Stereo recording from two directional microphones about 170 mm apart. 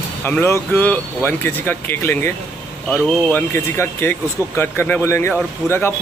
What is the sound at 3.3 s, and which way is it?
Speech, 15° left (ahead or behind).